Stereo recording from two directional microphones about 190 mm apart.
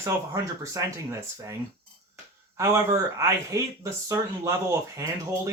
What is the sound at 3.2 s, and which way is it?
Speech, 15° right (ahead or behind).